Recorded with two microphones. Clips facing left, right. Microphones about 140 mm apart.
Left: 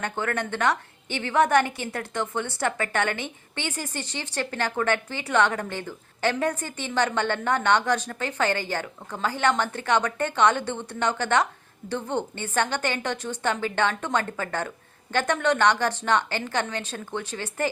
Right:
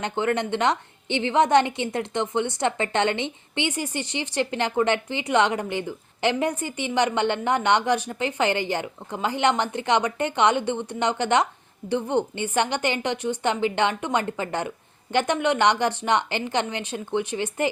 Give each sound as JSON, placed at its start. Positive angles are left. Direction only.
{"t": 0.0, "sound": "a woman's voice", "side_deg": -20}